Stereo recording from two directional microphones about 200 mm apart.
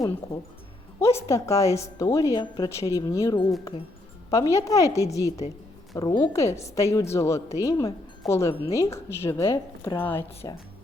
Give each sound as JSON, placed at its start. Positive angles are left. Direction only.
{"t": 0.9, "sound": "a woman's voice", "side_deg": 15}
{"t": 3.6, "sound": "speech", "side_deg": 25}
{"t": 4.3, "sound": "a woman's voice", "side_deg": 15}